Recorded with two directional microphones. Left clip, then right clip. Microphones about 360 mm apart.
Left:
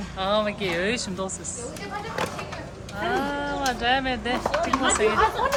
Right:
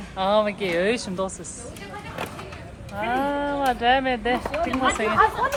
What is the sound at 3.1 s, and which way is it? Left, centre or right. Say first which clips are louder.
Speech: right 3 dB; centre.